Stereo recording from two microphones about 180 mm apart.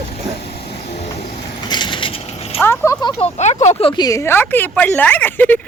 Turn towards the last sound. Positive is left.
turn(degrees=10)  # may be behind; listen again after turning